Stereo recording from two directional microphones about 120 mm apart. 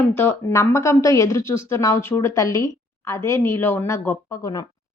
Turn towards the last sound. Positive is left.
turn(degrees=30)  # may be behind; listen again after turning